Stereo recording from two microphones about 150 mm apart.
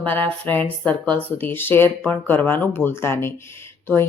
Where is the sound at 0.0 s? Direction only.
10° left (ahead or behind).